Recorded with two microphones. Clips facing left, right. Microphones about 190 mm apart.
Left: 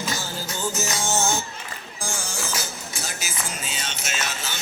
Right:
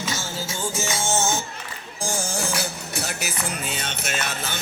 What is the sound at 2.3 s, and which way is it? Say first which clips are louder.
Music: right 4 dB; 65° right (ahead or behind).